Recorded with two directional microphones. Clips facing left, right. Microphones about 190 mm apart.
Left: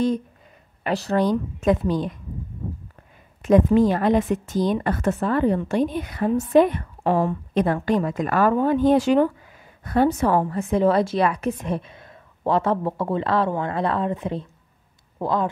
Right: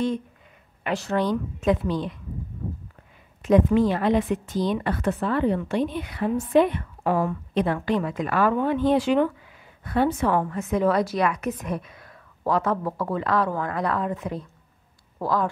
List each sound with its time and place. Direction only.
0.8 s a woman's voice: 35° left (ahead or behind)
3.4 s a woman's voice: 45° left (ahead or behind)
7.0 s speech: 30° left (ahead or behind)
7.5 s a woman's voice: 45° left (ahead or behind)
10.4 s a woman's voice: 30° left (ahead or behind)